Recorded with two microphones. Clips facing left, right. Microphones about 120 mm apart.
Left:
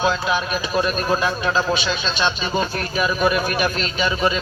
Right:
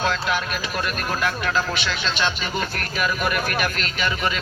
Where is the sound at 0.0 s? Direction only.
15° left (ahead or behind).